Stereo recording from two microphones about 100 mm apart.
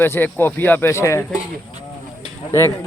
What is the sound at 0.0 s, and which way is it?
Speech, 20° left (ahead or behind).